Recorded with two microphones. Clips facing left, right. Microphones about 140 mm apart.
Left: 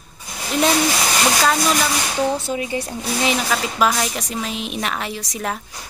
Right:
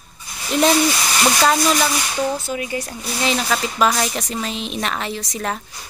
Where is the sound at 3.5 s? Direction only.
Centre (ahead or behind).